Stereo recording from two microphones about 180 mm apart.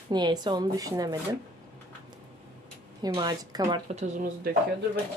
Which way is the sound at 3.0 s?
20° right (ahead or behind).